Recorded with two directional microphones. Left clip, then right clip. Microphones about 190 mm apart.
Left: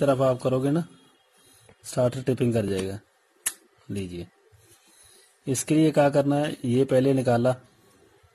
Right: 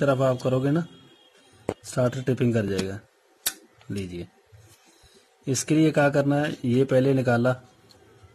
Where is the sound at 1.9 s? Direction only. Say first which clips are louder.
Left 2 dB; 15° left (ahead or behind).